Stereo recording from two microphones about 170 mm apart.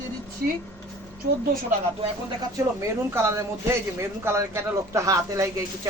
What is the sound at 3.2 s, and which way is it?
Speech, 15° right (ahead or behind).